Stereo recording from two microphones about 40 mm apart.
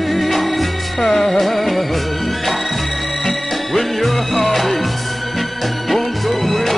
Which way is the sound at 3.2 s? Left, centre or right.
Centre.